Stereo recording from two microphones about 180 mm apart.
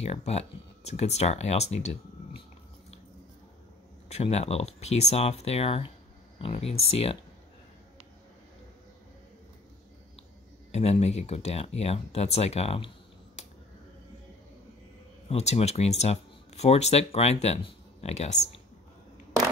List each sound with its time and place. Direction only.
0.0 s speech: 35° left (ahead or behind)
4.2 s speech: 35° left (ahead or behind)
10.7 s speech: 35° left (ahead or behind)
15.2 s speech: 35° left (ahead or behind)